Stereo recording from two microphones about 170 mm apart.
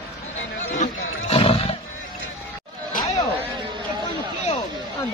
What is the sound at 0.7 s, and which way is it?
Roaring cats, 40° left (ahead or behind).